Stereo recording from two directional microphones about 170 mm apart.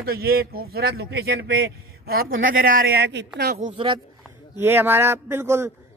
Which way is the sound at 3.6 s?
45° right (ahead or behind).